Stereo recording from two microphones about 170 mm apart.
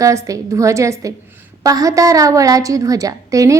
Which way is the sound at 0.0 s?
20° right (ahead or behind).